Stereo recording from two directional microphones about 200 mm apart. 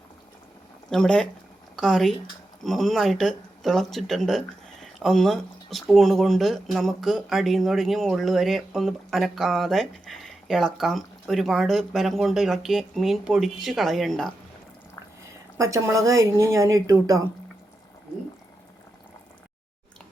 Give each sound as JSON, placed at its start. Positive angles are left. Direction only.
{"t": 0.9, "sound": "speech", "side_deg": 5}
{"t": 15.5, "sound": "speech", "side_deg": -15}